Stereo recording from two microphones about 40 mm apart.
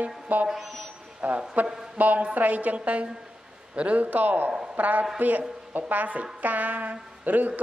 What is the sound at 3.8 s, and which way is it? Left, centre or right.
A woman's voice, right.